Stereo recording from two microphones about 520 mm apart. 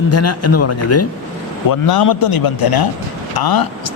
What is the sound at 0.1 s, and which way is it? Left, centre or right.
Speech, left.